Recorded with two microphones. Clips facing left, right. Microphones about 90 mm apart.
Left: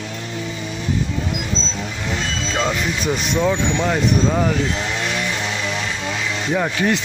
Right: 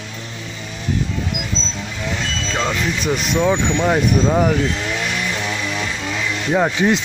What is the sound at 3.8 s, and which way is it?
Speech, 15° right (ahead or behind).